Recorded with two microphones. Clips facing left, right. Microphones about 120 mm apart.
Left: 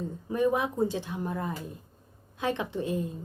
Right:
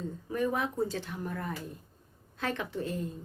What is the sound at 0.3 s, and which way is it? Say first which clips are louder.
A woman's voice: left 5 dB; 20° left (ahead or behind).